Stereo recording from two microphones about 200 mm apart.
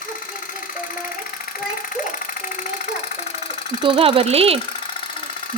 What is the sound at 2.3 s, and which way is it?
Speech, 40° left (ahead or behind).